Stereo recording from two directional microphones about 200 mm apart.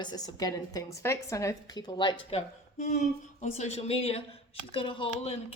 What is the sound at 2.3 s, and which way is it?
A woman's voice, 35° left (ahead or behind).